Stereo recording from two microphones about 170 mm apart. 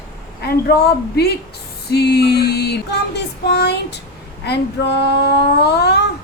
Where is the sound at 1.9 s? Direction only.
70° left (ahead or behind).